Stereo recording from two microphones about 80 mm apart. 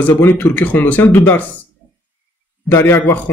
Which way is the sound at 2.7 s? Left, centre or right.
Left.